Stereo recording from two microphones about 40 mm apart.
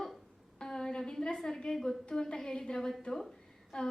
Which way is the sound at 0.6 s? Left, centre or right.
Centre.